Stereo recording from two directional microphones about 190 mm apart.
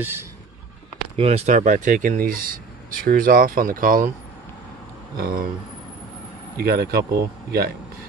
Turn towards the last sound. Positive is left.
turn(degrees=-55)  # may be behind; listen again after turning